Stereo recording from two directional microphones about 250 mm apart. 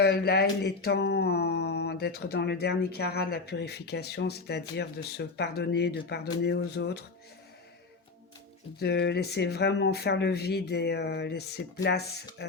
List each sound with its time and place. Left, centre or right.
0.0 s speech: left
8.8 s speech: left